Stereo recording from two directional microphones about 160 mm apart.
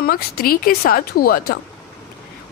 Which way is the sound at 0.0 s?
65° left (ahead or behind).